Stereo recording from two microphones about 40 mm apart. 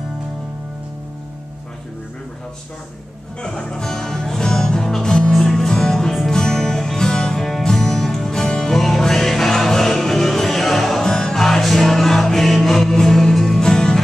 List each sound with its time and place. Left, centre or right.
3.4 s music: centre
7.3 s music: centre
11.4 s music: centre
13.6 s music: centre